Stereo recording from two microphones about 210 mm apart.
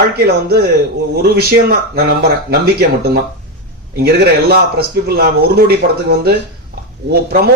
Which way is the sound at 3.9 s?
50° right (ahead or behind).